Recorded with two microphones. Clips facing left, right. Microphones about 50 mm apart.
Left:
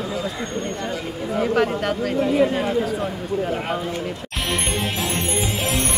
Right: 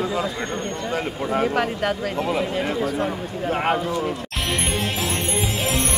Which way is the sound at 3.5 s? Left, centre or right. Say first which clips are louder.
Right 3 dB; right.